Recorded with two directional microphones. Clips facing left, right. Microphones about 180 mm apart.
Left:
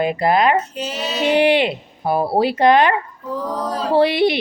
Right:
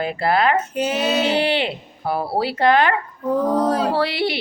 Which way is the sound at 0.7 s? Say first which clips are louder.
Right 5 dB; 55° right (ahead or behind).